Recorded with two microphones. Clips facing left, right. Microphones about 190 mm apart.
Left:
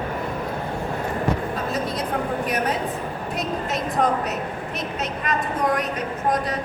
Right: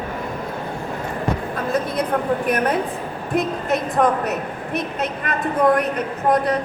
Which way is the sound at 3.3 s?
55° right (ahead or behind).